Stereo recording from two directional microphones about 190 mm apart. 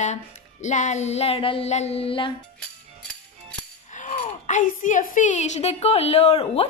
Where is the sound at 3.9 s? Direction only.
40° left (ahead or behind).